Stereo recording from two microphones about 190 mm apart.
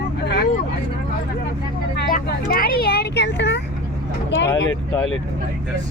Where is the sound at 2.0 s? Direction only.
55° left (ahead or behind).